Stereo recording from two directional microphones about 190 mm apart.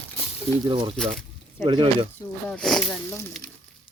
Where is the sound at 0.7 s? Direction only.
30° right (ahead or behind).